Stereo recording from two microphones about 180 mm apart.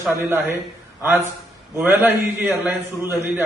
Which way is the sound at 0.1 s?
10° right (ahead or behind).